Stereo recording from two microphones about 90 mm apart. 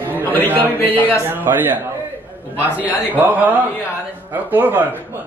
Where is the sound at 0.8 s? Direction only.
20° left (ahead or behind).